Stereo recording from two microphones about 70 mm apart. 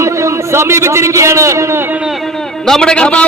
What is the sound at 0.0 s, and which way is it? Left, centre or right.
A man's voice, right.